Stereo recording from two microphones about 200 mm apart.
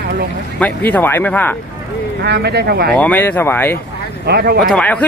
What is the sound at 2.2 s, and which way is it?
Speech, 55° right (ahead or behind).